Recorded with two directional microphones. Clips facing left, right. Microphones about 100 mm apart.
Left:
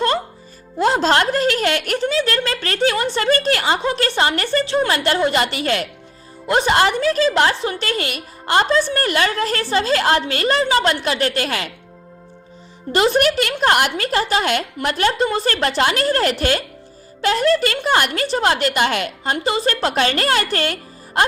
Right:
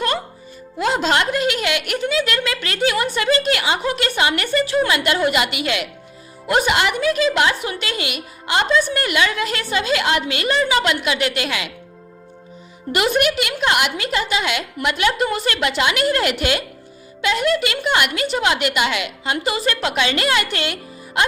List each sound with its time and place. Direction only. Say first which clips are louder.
0.8 s a woman's voice: left 3 dB; 35° left (ahead or behind)
4.9 s a woman's voice: left 1 dB; 35° left (ahead or behind)
12.9 s a woman's voice: left 2 dB; 30° left (ahead or behind)
15.5 s a woman's voice: left 2 dB; 40° left (ahead or behind)